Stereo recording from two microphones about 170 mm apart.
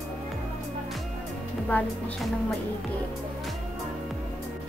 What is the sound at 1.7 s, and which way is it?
Speech, 10° left (ahead or behind).